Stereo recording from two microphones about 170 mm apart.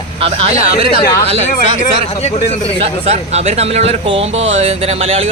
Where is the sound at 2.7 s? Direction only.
35° right (ahead or behind).